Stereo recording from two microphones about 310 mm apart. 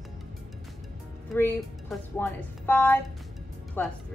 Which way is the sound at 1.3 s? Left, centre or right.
Centre.